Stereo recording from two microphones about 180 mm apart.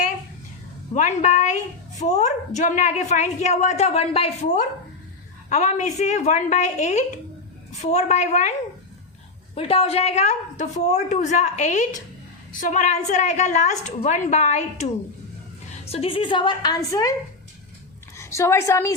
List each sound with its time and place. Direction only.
0.9 s a woman's voice: 40° left (ahead or behind)
9.6 s a woman's voice: 30° left (ahead or behind)
15.9 s a woman's voice: 30° left (ahead or behind)
18.2 s a woman's voice: 15° left (ahead or behind)